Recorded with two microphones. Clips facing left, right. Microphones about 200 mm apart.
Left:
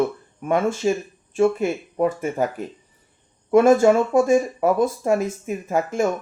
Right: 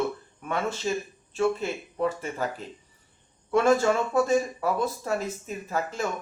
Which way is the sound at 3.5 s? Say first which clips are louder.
Left 7 dB; 50° left (ahead or behind).